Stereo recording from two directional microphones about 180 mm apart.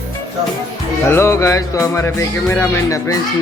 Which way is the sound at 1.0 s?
15° left (ahead or behind).